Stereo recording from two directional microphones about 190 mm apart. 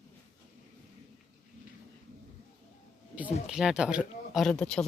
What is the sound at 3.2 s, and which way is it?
Speech, centre (ahead or behind).